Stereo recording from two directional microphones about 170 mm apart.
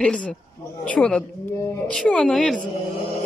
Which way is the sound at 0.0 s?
5° left (ahead or behind).